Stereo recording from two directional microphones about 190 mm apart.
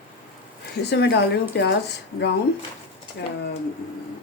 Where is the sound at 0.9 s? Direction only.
60° left (ahead or behind).